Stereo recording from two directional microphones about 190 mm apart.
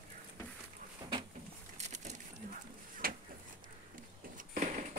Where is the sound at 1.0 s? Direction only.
20° right (ahead or behind).